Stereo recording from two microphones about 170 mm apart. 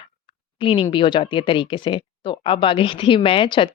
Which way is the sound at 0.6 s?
30° left (ahead or behind).